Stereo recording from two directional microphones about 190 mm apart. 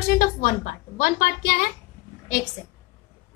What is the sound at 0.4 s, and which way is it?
Speech, 45° left (ahead or behind).